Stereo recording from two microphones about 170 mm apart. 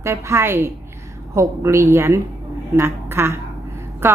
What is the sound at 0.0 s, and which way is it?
A woman's voice, 15° right (ahead or behind).